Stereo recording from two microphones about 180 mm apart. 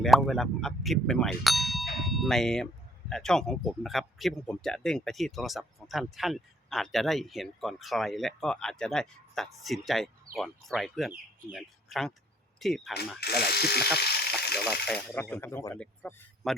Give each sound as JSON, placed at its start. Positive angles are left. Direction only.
{"t": 0.0, "sound": "speech", "side_deg": 0}
{"t": 13.1, "sound": "speech", "side_deg": 65}
{"t": 14.0, "sound": "electric toothbrush", "side_deg": 65}
{"t": 14.6, "sound": "speech", "side_deg": 0}